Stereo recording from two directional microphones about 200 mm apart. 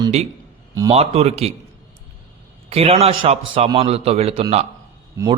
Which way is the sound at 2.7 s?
30° right (ahead or behind).